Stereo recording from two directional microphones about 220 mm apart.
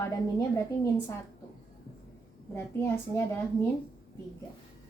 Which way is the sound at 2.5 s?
10° left (ahead or behind).